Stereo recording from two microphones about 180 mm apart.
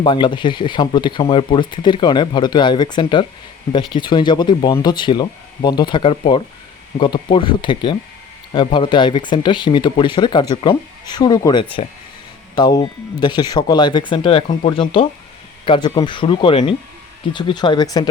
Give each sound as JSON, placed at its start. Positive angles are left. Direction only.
{"t": 0.0, "sound": "speech", "side_deg": 25}